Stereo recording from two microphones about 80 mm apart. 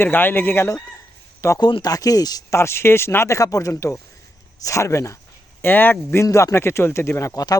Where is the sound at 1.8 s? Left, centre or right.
Left.